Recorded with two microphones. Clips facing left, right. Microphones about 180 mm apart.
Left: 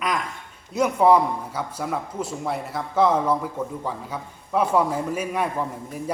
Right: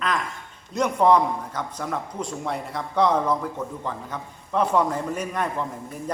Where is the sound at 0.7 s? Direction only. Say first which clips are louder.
Left 1 dB; 5° left (ahead or behind).